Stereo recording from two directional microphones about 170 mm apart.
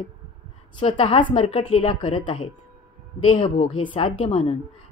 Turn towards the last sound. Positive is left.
turn(degrees=35)  # may be behind; listen again after turning